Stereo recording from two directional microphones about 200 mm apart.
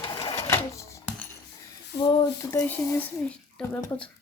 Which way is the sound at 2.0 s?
20° left (ahead or behind).